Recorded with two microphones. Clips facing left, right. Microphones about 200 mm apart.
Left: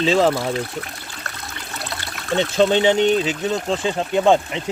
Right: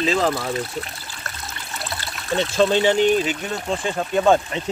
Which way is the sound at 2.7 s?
20° left (ahead or behind).